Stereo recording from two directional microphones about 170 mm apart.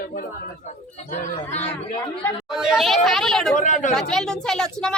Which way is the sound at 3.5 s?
45° left (ahead or behind).